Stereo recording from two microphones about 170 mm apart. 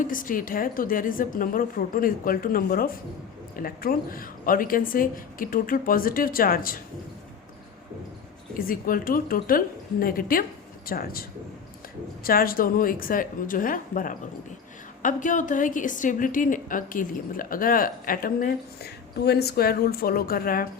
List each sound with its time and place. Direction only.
0.0 s a woman's voice: 55° left (ahead or behind)
8.5 s a woman's voice: 55° left (ahead or behind)